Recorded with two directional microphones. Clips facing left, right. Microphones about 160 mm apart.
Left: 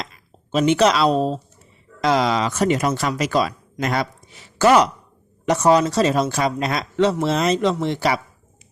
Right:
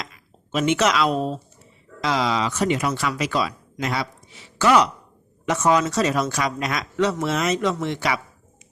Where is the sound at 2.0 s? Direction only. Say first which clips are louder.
Left 4 dB; 50° left (ahead or behind).